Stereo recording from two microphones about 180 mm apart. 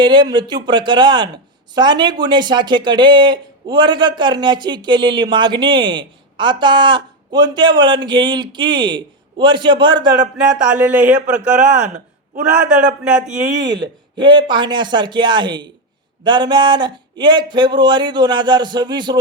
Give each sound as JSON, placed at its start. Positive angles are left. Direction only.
{"t": 0.0, "sound": "speech", "side_deg": -25}
{"t": 10.7, "sound": "a man's voice", "side_deg": -5}
{"t": 13.8, "sound": "speech", "side_deg": -25}